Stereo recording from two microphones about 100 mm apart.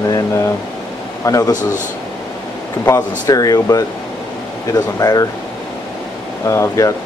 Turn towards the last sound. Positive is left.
turn(degrees=30)  # may be behind; listen again after turning